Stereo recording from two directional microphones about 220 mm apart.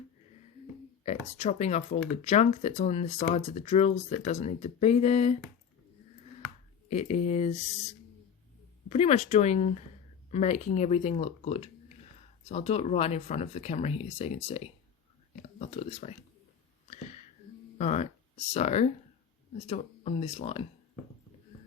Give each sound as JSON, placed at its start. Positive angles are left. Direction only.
{"t": 1.0, "sound": "speech", "side_deg": 30}
{"t": 6.9, "sound": "speech", "side_deg": 30}
{"t": 17.7, "sound": "speech", "side_deg": 30}